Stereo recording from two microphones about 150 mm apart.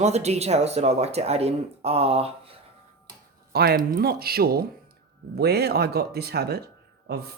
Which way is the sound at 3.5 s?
80° right.